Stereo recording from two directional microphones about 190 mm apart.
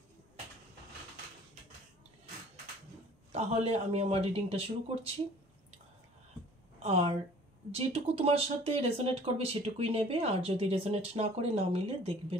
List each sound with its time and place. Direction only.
3.3 s speech: 35° right (ahead or behind)
6.8 s speech: 35° right (ahead or behind)